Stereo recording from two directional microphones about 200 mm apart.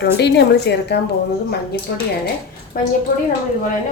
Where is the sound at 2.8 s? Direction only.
45° left (ahead or behind).